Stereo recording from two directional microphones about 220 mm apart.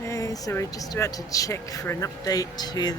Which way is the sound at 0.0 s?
15° left (ahead or behind).